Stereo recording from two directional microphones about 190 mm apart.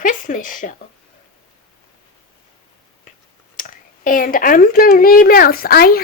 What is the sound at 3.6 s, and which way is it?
Speech, 45° left (ahead or behind).